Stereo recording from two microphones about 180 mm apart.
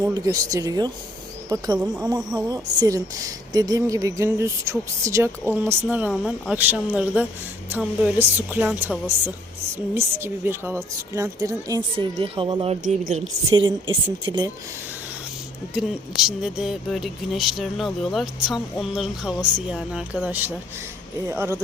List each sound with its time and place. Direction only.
0.0 s speech: 20° right (ahead or behind)
11.9 s speech: 30° right (ahead or behind)
15.7 s speech: 5° right (ahead or behind)